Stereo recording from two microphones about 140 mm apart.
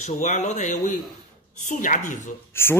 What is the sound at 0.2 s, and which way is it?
Speech, 60° left (ahead or behind).